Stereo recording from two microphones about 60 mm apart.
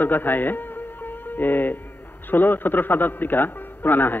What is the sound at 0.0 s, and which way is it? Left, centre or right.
Music, left.